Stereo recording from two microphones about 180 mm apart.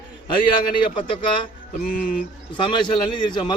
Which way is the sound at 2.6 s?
25° left (ahead or behind).